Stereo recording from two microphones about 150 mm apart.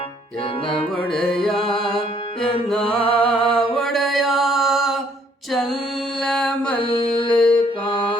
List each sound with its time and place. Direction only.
1.1 s music: 5° left (ahead or behind)
6.2 s mantra: 5° left (ahead or behind)
6.7 s a sound: 35° left (ahead or behind)
7.3 s mantra: 10° left (ahead or behind)